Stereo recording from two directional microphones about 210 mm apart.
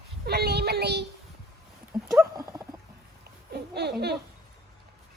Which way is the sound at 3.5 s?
50° right (ahead or behind).